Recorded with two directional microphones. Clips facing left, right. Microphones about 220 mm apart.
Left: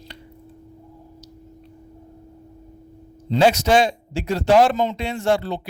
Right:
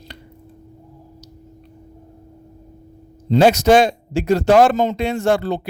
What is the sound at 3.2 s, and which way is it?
A man's voice, 45° right (ahead or behind).